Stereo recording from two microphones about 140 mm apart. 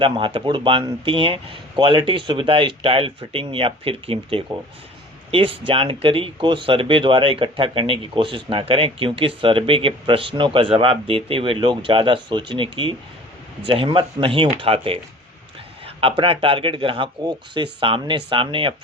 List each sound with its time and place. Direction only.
0.0 s speech: 40° right (ahead or behind)